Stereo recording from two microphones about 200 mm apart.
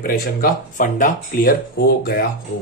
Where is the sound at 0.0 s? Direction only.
45° left (ahead or behind).